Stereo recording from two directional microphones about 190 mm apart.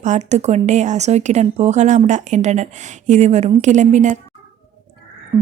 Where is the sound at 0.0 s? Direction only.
40° right (ahead or behind).